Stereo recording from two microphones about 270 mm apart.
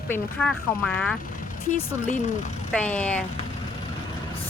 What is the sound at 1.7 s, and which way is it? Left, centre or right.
Speech, left.